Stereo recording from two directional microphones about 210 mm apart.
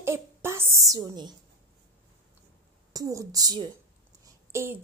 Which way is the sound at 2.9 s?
15° right (ahead or behind).